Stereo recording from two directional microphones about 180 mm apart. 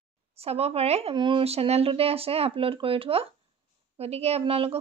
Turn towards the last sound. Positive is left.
turn(degrees=-30)  # may be behind; listen again after turning